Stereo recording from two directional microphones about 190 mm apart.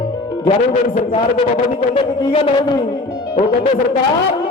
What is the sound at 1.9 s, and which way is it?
Speech, 30° left (ahead or behind).